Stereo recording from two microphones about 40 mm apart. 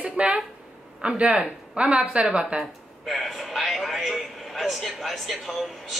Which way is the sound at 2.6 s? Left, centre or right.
Centre.